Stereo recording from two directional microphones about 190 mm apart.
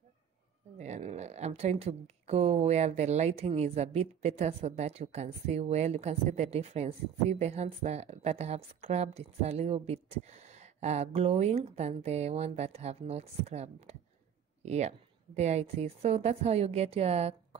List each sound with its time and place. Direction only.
0.7 s speech: 35° right (ahead or behind)